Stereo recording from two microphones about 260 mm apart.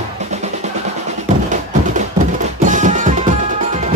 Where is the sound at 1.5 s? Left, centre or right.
Right.